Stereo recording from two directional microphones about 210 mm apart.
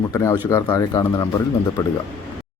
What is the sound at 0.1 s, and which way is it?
A man's voice, 15° left (ahead or behind).